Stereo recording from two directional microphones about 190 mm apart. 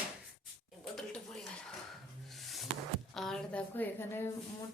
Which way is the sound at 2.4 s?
Centre (ahead or behind).